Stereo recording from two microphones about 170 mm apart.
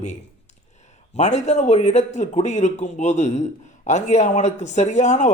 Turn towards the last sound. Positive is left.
turn(degrees=45)  # may be behind; listen again after turning